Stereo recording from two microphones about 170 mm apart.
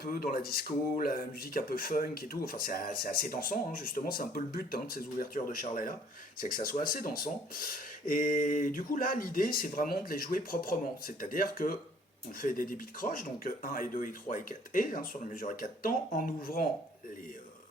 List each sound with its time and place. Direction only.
0.0 s speech: 60° left (ahead or behind)